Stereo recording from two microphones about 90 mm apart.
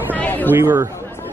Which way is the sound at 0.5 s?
25° right (ahead or behind).